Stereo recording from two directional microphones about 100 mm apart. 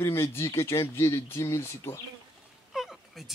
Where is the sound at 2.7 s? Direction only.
Centre (ahead or behind).